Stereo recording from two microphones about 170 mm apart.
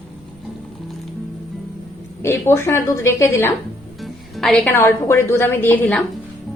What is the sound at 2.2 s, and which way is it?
A woman's voice, 15° left (ahead or behind).